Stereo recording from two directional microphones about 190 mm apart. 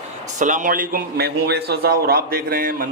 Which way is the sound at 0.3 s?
40° right (ahead or behind).